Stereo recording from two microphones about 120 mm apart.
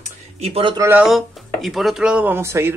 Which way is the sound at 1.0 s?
Centre (ahead or behind).